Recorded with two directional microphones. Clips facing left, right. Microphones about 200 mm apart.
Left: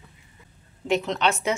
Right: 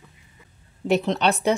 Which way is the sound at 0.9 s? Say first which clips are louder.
Right 3 dB; 35° right (ahead or behind).